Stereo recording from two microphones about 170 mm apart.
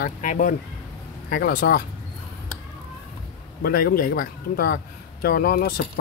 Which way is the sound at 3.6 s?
60° left (ahead or behind).